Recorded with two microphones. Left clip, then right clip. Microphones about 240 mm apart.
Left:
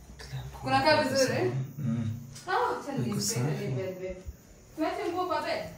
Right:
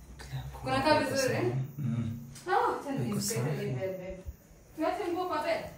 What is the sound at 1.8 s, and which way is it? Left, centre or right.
Speech, centre.